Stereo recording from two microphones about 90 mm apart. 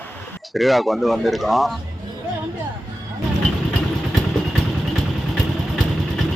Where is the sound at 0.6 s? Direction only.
Centre (ahead or behind).